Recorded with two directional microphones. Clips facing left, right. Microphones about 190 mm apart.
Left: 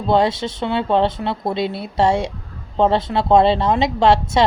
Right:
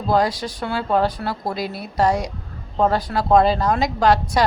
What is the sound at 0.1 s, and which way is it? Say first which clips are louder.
Speech: left 3 dB; 25° left (ahead or behind).